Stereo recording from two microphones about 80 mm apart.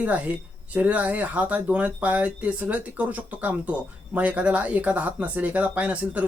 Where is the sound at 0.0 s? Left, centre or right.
Centre.